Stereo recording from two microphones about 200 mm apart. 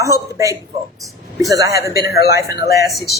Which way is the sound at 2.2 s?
50° left (ahead or behind).